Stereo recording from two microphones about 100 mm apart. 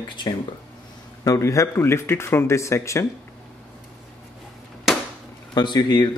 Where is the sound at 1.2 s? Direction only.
30° left (ahead or behind).